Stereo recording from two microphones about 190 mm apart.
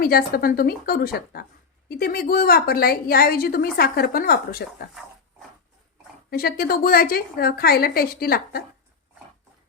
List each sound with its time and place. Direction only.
0.0 s a woman's voice: 50° left (ahead or behind)
6.3 s a woman's voice: 55° left (ahead or behind)